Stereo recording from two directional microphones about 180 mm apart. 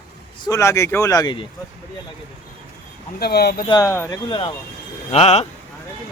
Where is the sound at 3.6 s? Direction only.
20° left (ahead or behind).